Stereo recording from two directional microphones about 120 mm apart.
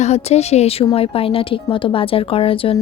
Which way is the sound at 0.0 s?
65° left (ahead or behind).